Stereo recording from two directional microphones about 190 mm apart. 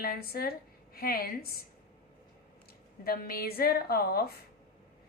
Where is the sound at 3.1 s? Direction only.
50° left (ahead or behind).